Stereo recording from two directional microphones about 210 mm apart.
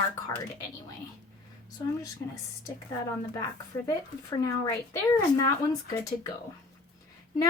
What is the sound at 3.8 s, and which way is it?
Speech, 15° left (ahead or behind).